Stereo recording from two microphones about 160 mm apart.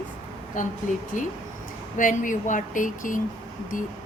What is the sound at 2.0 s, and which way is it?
Speech, 55° left (ahead or behind).